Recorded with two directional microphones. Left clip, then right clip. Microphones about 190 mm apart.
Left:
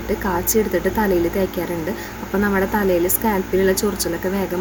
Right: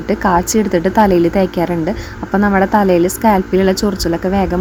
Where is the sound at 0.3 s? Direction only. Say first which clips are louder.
Right 6 dB; 45° right (ahead or behind).